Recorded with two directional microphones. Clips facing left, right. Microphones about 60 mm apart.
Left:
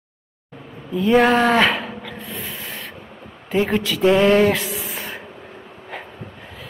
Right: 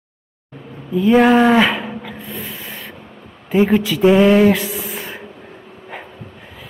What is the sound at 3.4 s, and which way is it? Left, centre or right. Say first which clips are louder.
Speech: right 5 dB; centre.